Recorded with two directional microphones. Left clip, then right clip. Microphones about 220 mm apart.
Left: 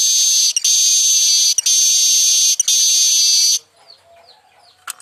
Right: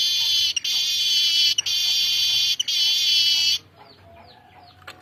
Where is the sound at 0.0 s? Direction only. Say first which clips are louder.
Left 5 dB; 30° left (ahead or behind).